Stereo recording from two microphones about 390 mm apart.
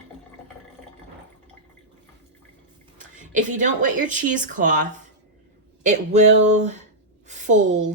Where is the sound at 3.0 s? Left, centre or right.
Centre.